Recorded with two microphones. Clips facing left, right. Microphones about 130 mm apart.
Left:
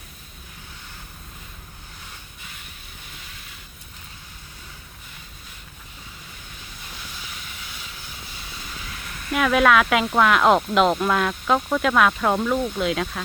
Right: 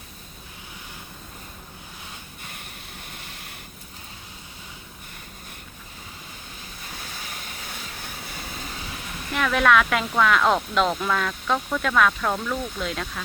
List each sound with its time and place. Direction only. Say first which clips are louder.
7.7 s vehicle: right 3 dB; 60° right (ahead or behind)
9.3 s speech: left 2 dB; 5° left (ahead or behind)